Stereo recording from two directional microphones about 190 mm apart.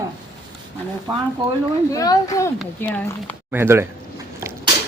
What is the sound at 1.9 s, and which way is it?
Speech, 20° left (ahead or behind).